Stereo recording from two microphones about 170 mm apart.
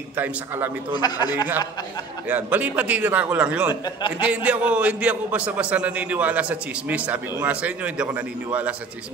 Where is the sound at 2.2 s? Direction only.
10° right (ahead or behind).